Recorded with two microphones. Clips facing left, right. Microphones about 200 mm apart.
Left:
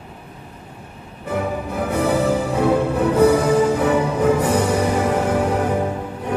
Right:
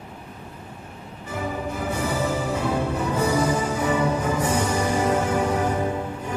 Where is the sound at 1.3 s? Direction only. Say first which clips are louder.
Left 5 dB; 60° left (ahead or behind).